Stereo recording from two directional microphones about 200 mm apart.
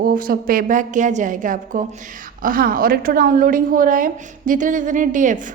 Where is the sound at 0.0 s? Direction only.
45° right (ahead or behind).